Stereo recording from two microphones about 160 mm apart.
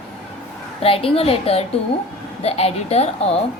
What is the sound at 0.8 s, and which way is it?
A woman's voice, 35° left (ahead or behind).